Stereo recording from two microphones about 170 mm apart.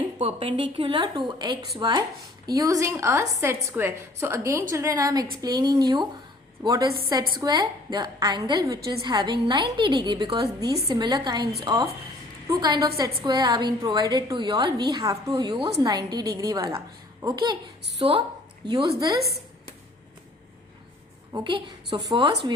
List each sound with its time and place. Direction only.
0.0 s a woman's voice: 35° right (ahead or behind)
19.2 s a sound: 65° right (ahead or behind)
21.3 s a woman's voice: 30° right (ahead or behind)